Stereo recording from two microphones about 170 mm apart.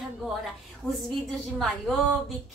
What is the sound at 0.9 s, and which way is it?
A woman's voice, centre (ahead or behind).